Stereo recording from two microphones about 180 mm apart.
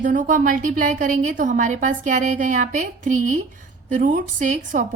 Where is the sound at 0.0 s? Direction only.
45° right (ahead or behind).